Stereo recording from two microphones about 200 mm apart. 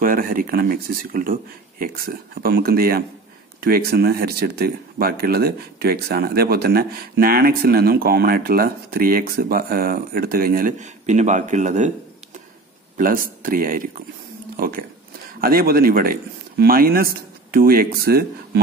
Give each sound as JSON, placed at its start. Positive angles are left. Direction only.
{"t": 0.0, "sound": "speech", "side_deg": -45}
{"t": 12.9, "sound": "speech", "side_deg": -45}